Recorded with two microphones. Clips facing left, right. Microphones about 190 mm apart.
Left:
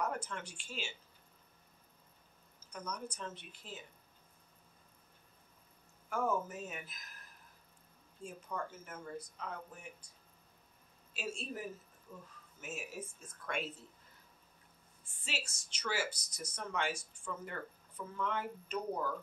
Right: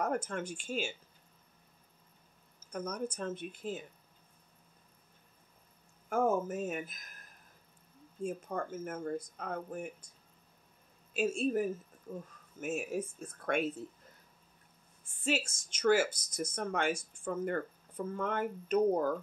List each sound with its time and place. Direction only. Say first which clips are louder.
0.0 s speech: right 5 dB; 50° right (ahead or behind)
2.7 s speech: right 7 dB; 50° right (ahead or behind)
6.0 s speech: right 5 dB; 50° right (ahead or behind)
8.2 s speech: right 7 dB; 50° right (ahead or behind)
11.1 s speech: right 12 dB; 50° right (ahead or behind)
15.0 s speech: right 11 dB; 50° right (ahead or behind)